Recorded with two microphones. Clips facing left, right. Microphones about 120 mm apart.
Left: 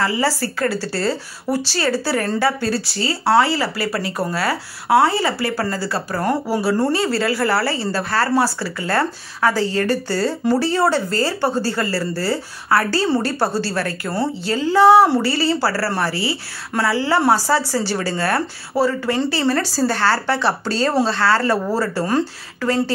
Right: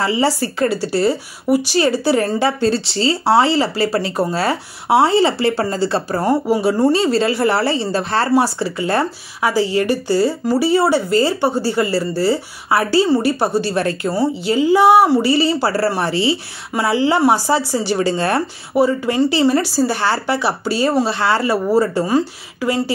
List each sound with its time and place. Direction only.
0.0 s speech: 20° right (ahead or behind)